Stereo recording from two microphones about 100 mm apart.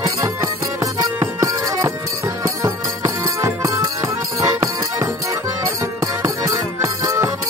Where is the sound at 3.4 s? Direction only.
30° right (ahead or behind).